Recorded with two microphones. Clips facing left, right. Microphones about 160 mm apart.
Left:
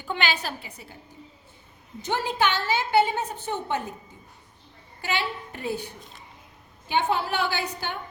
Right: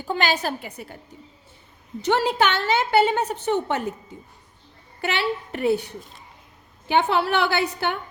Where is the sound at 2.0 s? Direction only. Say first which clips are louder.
Right 5 dB; 75° right (ahead or behind).